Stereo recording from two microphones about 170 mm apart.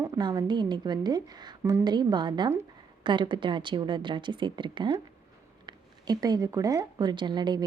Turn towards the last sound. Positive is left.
turn(degrees=-25)  # may be behind; listen again after turning